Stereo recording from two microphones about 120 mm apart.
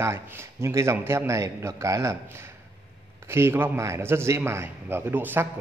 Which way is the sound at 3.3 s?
20° right (ahead or behind).